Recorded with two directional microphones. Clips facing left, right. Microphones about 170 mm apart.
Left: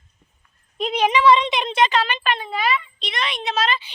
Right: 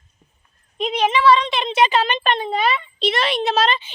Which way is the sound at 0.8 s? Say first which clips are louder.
Even; 10° left (ahead or behind).